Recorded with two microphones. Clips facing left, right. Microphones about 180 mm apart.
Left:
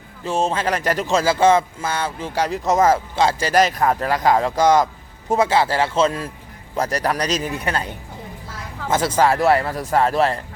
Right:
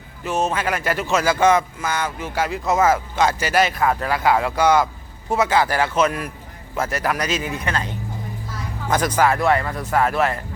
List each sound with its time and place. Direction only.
0.3 s a man's voice: 30° left (ahead or behind)
8.9 s speech: 25° left (ahead or behind)